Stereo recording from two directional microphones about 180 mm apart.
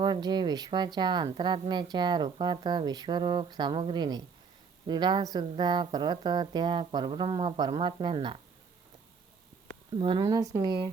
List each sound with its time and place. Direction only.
0.0 s speech: 25° right (ahead or behind)
10.0 s speech: 25° right (ahead or behind)